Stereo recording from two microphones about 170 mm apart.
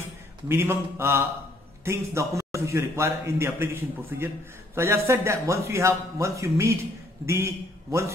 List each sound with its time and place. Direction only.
0.5 s a man's voice: 15° right (ahead or behind)